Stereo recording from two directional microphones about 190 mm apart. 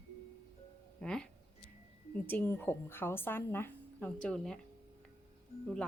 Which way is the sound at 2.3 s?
10° left (ahead or behind).